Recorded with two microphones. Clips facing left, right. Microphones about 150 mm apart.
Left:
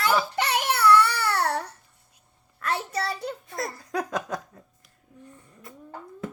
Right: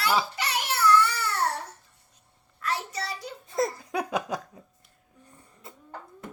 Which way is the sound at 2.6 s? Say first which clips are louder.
Left 3 dB; 60° left (ahead or behind).